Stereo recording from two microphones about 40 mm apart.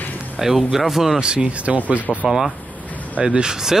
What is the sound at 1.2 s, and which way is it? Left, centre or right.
Speech, right.